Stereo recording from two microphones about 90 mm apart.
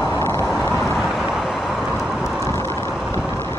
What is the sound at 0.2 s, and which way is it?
Vehicle, 30° left (ahead or behind).